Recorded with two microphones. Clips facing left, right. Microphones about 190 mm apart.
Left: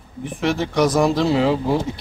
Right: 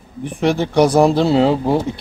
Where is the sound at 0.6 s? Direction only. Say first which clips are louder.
Right 5 dB; 30° right (ahead or behind).